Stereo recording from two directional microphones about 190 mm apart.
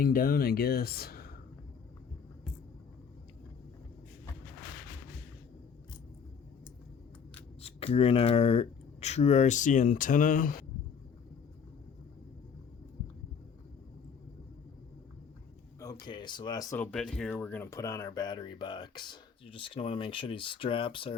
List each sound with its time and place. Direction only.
0.0 s speech: 50° left (ahead or behind)
7.6 s speech: 30° left (ahead or behind); by 10.7 s 45° left (ahead or behind)
15.8 s speech: 20° left (ahead or behind)